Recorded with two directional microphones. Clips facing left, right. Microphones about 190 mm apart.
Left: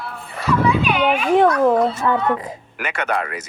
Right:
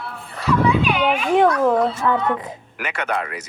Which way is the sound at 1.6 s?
5° left (ahead or behind).